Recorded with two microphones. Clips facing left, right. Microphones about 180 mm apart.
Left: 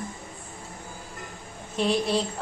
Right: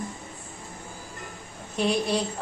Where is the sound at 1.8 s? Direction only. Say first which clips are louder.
Even; centre (ahead or behind).